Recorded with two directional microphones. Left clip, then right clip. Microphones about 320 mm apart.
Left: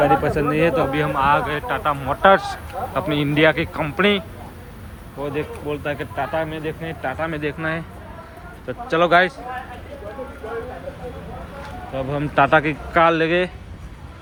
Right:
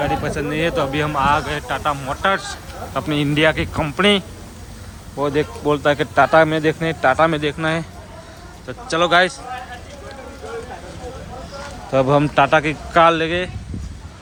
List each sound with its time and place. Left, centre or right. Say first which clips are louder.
0.0 s speech: left 4 dB; centre
5.2 s speech: right 7 dB; centre
11.9 s speech: right 5 dB; centre